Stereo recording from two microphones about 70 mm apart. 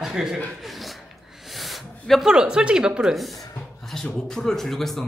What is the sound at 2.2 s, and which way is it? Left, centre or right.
Speech, centre.